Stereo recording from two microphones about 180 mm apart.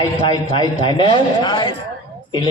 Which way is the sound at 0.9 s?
25° left (ahead or behind).